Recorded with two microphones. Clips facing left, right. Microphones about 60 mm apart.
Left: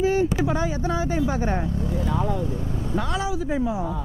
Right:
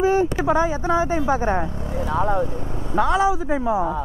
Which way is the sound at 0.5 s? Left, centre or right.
Right.